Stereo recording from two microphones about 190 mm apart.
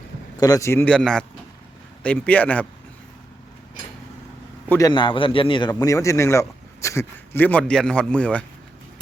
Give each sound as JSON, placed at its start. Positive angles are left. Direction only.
{"t": 0.3, "sound": "a man's voice", "side_deg": 20}
{"t": 4.7, "sound": "a man's voice", "side_deg": 20}